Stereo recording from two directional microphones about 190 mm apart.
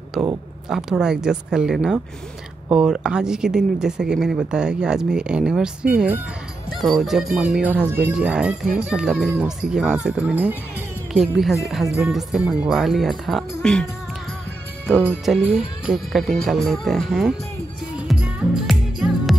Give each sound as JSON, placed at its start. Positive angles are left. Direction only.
{"t": 0.7, "sound": "speech", "side_deg": 0}
{"t": 15.3, "sound": "speech", "side_deg": 0}
{"t": 17.9, "sound": "music", "side_deg": -5}